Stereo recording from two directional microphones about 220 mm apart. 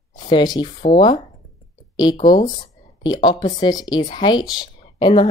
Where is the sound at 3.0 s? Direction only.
20° left (ahead or behind).